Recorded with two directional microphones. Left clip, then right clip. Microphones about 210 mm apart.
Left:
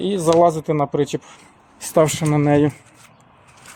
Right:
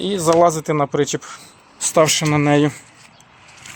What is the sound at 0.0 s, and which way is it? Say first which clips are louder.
Speech: right 1 dB; 5° left (ahead or behind).